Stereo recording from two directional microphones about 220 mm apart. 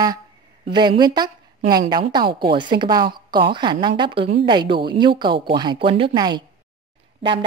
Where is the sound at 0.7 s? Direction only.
20° right (ahead or behind).